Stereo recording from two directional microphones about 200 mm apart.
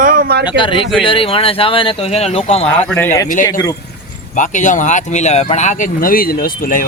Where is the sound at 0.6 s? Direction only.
25° left (ahead or behind).